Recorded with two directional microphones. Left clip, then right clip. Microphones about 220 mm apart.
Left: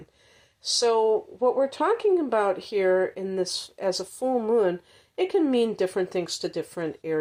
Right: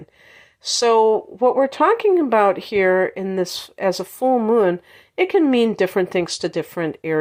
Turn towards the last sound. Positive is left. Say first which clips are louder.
# right 7 dB
turn(degrees=-30)  # may be behind; listen again after turning